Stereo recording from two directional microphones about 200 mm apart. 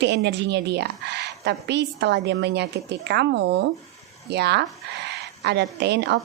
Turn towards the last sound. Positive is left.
turn(degrees=-60)  # may be behind; listen again after turning